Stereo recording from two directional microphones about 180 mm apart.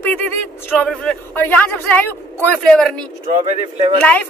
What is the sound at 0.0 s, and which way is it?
A man's voice, 10° left (ahead or behind).